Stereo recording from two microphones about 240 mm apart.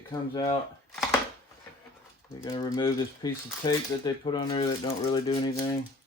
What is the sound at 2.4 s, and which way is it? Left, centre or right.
Speech, centre.